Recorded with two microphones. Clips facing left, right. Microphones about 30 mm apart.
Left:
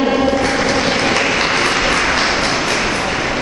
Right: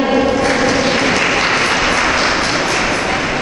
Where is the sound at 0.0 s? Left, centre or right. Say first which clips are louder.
Right 1 dB; centre.